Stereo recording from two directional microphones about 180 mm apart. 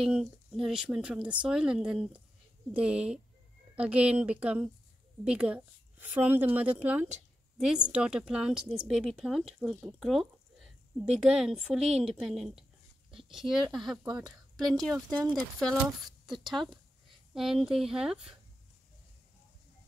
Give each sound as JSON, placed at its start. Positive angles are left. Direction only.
{"t": 0.0, "sound": "a woman's voice", "side_deg": 0}
{"t": 15.0, "sound": "speech", "side_deg": -25}
{"t": 15.6, "sound": "speech", "side_deg": 0}